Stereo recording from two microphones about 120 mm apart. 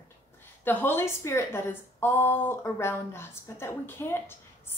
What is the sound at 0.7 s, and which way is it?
A woman's voice, 15° left (ahead or behind).